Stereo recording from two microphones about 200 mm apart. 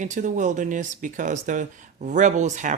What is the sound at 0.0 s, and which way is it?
Speech, 40° right (ahead or behind).